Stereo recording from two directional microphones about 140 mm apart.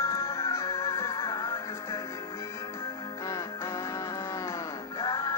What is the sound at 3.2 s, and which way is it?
Music, 20° left (ahead or behind).